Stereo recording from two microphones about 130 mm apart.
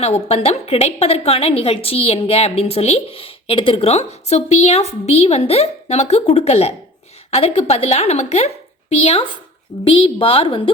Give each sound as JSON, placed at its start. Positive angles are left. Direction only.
{"t": 0.0, "sound": "a woman's voice", "side_deg": 55}